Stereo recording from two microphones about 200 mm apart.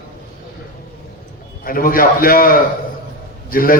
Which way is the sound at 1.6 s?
45° left (ahead or behind).